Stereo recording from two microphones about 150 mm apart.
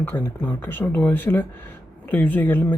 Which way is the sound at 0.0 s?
15° left (ahead or behind).